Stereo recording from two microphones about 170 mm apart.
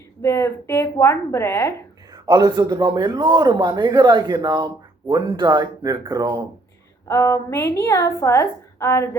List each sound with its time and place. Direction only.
0.2 s a woman's voice: 15° left (ahead or behind)
2.1 s a man's voice: 20° right (ahead or behind)
7.1 s a woman's voice: 15° left (ahead or behind)